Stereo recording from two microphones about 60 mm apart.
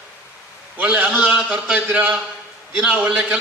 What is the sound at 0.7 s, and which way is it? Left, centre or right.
Speech, right.